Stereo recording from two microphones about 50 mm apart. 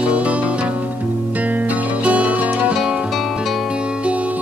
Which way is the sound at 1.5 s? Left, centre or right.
Right.